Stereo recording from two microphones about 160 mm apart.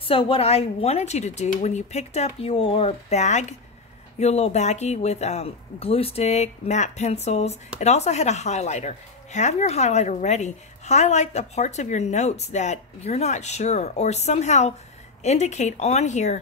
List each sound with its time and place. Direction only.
0.0 s speech: 35° left (ahead or behind)